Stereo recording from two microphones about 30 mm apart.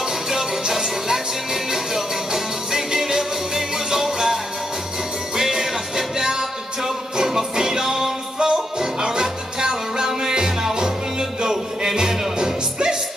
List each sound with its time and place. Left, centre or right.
0.0 s music: centre